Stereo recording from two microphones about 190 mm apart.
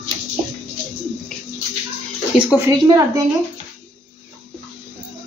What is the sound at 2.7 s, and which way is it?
Speech, 15° right (ahead or behind).